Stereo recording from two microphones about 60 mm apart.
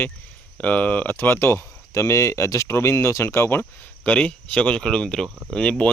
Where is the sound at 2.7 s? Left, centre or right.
Left.